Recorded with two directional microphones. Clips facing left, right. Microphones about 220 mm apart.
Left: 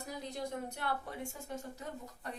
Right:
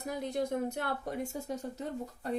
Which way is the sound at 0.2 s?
55° right (ahead or behind).